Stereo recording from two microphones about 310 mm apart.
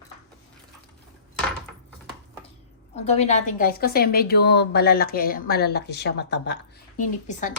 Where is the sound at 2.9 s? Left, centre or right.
Left.